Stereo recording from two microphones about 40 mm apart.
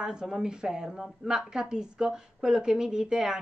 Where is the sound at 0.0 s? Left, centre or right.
Centre.